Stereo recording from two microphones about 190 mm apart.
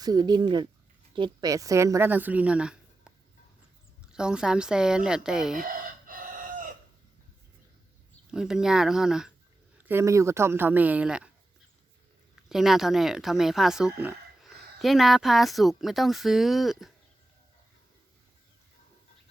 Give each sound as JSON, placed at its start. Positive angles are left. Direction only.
{"t": 0.0, "sound": "speech", "side_deg": -20}
{"t": 4.1, "sound": "speech", "side_deg": -5}
{"t": 5.5, "sound": "fowl", "side_deg": -45}
{"t": 8.3, "sound": "speech", "side_deg": -5}
{"t": 12.5, "sound": "speech", "side_deg": 0}